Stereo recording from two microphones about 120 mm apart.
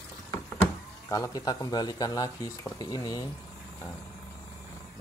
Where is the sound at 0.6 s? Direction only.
25° left (ahead or behind).